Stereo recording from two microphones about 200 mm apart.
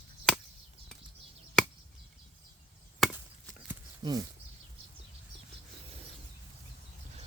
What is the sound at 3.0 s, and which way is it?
Chop, centre (ahead or behind).